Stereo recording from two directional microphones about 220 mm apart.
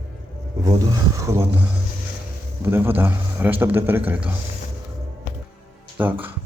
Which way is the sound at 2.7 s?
10° right (ahead or behind).